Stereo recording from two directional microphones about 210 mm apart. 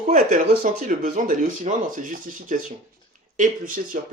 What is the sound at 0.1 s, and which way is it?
Speech, 40° right (ahead or behind).